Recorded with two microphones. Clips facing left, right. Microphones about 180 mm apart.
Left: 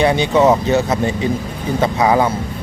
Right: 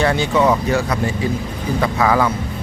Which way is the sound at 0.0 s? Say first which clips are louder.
Left 3 dB; 20° left (ahead or behind).